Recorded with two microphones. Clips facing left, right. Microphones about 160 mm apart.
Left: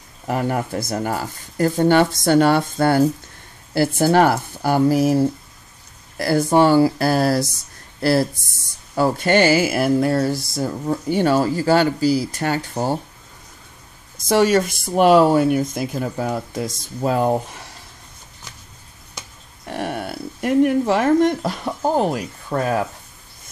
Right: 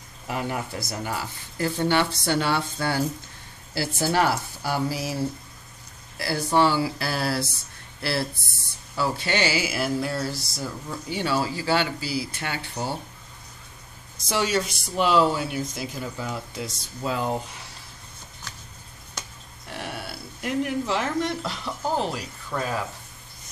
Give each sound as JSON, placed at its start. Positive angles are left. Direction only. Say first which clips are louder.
{"t": 0.3, "sound": "speech", "louder": "left 7 dB", "side_deg": 50}
{"t": 14.1, "sound": "speech", "louder": "left 9 dB", "side_deg": 50}
{"t": 18.5, "sound": "a sound", "louder": "even", "side_deg": 10}
{"t": 19.7, "sound": "speech", "louder": "left 9 dB", "side_deg": 50}